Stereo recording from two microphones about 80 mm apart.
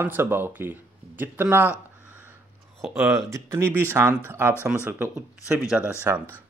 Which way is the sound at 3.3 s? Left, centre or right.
Right.